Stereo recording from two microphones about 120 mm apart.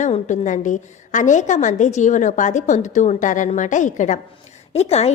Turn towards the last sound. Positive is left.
turn(degrees=65)  # may be behind; listen again after turning